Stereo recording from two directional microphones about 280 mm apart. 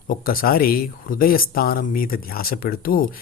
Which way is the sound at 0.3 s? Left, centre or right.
Left.